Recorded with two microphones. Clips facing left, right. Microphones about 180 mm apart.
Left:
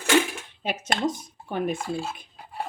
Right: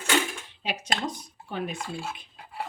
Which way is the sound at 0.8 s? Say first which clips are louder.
Left 6 dB; 50° left (ahead or behind).